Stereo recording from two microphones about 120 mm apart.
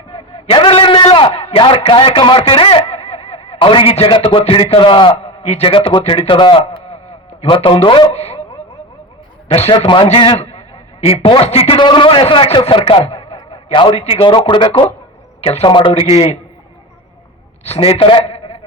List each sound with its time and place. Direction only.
0.1 s a man's voice: 55° left (ahead or behind)
8.1 s a man's voice: 60° left (ahead or behind)
9.5 s a man's voice: 50° left (ahead or behind)
10.1 s a man's voice: 55° left (ahead or behind)
14.3 s a man's voice: 40° left (ahead or behind)
15.4 s speech: 60° left (ahead or behind)
15.6 s a man's voice: 40° left (ahead or behind)
15.9 s a man's voice: 55° left (ahead or behind)
17.6 s a man's voice: 55° left (ahead or behind)